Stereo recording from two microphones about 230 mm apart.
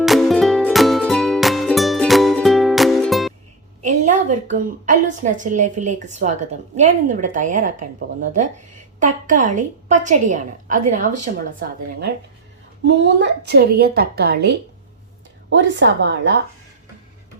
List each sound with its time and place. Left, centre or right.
0.0 s music: centre
3.8 s a woman's voice: right
12.8 s a woman's voice: right